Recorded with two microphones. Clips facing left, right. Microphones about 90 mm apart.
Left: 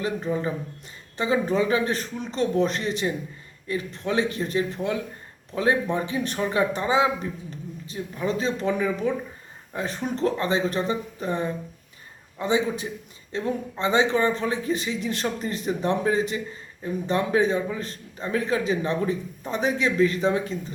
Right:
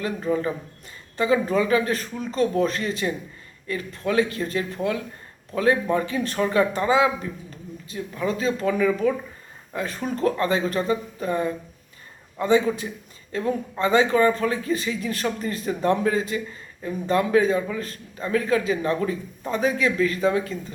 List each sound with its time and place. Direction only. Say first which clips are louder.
1.1 s a man's voice: right 2 dB; 25° left (ahead or behind)